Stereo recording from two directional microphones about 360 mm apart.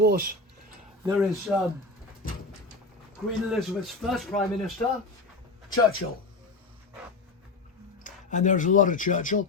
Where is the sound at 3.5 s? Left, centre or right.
Centre.